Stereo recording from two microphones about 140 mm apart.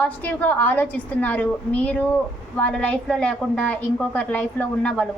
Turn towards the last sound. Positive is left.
turn(degrees=10)  # may be behind; listen again after turning